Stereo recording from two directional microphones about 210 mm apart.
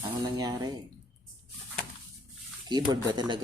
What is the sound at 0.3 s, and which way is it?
Speech, 15° right (ahead or behind).